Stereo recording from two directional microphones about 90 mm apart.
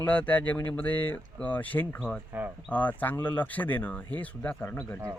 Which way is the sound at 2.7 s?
15° left (ahead or behind).